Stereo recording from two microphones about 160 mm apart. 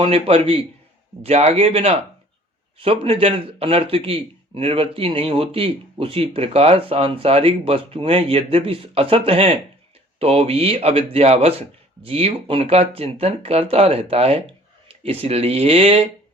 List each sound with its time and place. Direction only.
0.0 s a man's voice: 35° right (ahead or behind)